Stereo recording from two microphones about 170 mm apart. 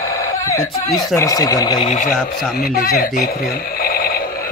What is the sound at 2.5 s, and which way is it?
Speech, 60° left (ahead or behind).